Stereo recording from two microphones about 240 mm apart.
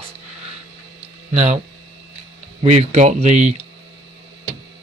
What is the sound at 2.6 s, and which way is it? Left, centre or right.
Speech, right.